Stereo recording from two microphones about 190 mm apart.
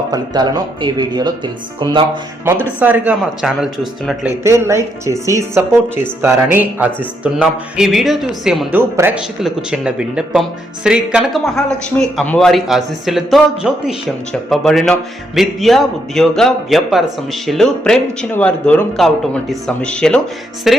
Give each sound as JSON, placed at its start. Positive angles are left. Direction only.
{"t": 0.1, "sound": "speech", "side_deg": -20}
{"t": 2.4, "sound": "speech", "side_deg": -10}
{"t": 4.4, "sound": "a man's voice", "side_deg": -15}
{"t": 8.7, "sound": "a man's voice", "side_deg": -10}